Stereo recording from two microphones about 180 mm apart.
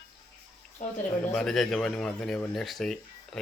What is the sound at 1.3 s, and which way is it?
Speech, 5° left (ahead or behind).